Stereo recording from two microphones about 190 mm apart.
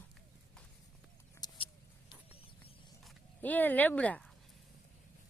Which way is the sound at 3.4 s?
10° left (ahead or behind).